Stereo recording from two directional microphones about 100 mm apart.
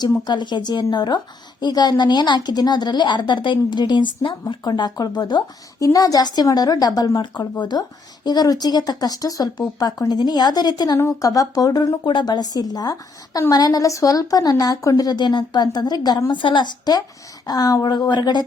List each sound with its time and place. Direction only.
0.0 s speech: 45° left (ahead or behind)